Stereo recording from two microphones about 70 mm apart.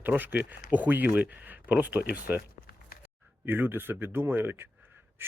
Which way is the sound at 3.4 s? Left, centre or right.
Right.